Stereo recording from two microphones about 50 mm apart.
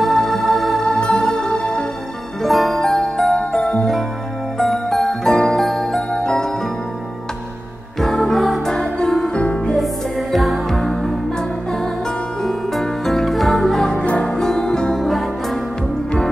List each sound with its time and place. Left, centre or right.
0.0 s music: centre
0.8 s music: centre
2.4 s music: centre
3.3 s music: centre
4.6 s music: centre
8.0 s music: centre
9.3 s music: left
10.3 s music: centre
12.4 s music: centre
13.9 s music: left
14.2 s music: centre
15.0 s music: centre